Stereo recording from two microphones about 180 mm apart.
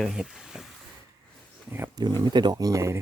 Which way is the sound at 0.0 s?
Centre (ahead or behind).